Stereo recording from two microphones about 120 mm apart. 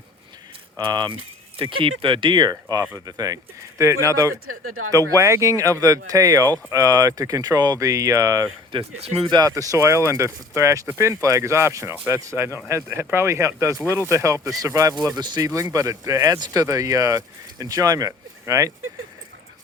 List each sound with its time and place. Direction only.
0.8 s speech: 35° right (ahead or behind)
8.7 s speech: 55° right (ahead or behind)
9.2 s speech: 35° right (ahead or behind)
9.6 s speech: 25° right (ahead or behind)